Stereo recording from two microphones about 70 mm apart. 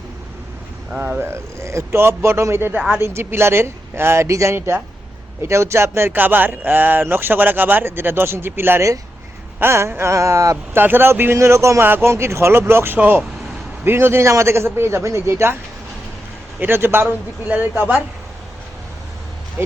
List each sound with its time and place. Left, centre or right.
0.9 s speech: right
1.3 s speech: right
9.6 s a sound: right
10.8 s speech: right
11.8 s speech: right
12.1 s speech: right
16.6 s speech: right
19.6 s speech: right